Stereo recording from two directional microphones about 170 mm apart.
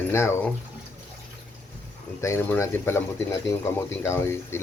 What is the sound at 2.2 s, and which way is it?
Speech, 15° left (ahead or behind).